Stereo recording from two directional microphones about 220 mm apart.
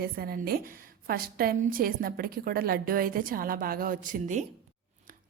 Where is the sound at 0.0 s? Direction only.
45° right (ahead or behind).